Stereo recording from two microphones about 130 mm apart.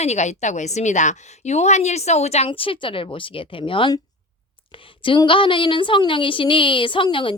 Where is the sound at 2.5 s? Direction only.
40° left (ahead or behind).